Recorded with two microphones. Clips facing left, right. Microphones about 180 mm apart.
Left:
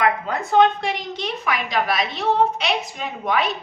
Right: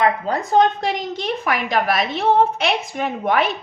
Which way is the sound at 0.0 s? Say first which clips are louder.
Right 2 dB; 35° right (ahead or behind).